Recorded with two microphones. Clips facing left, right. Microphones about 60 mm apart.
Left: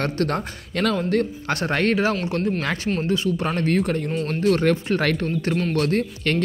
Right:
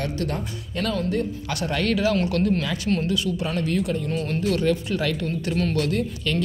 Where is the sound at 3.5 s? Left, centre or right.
Left.